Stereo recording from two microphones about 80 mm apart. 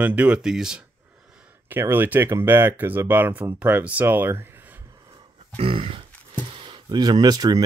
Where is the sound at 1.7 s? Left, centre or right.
Right.